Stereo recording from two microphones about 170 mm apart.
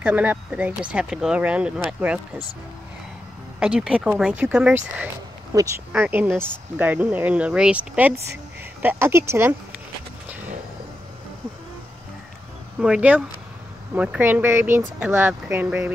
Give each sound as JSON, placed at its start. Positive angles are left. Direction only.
{"t": 0.0, "sound": "speech", "side_deg": -10}
{"t": 3.5, "sound": "speech", "side_deg": -5}
{"t": 5.5, "sound": "speech", "side_deg": -15}
{"t": 12.8, "sound": "speech", "side_deg": -5}